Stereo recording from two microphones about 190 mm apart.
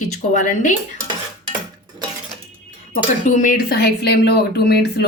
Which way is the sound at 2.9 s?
40° left (ahead or behind).